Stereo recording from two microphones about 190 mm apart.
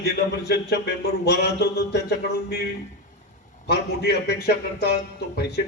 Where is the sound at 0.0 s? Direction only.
60° left (ahead or behind).